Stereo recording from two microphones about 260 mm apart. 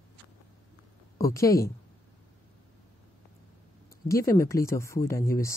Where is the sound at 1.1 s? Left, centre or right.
Centre.